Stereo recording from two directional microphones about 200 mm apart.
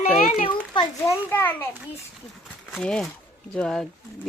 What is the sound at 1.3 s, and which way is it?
Speech, 10° left (ahead or behind).